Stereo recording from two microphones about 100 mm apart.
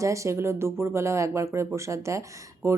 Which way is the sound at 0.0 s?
30° right (ahead or behind).